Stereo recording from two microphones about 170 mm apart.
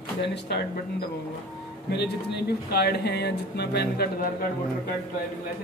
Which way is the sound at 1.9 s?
80° left.